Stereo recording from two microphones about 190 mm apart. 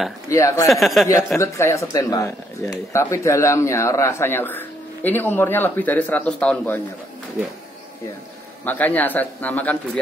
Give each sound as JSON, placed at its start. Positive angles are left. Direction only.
{"t": 0.3, "sound": "speech", "side_deg": 15}
{"t": 0.7, "sound": "speech", "side_deg": 0}
{"t": 1.4, "sound": "speech", "side_deg": 15}
{"t": 8.6, "sound": "speech", "side_deg": 10}